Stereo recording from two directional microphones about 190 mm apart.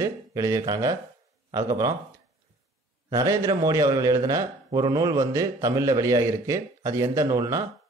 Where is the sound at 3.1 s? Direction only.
20° right (ahead or behind).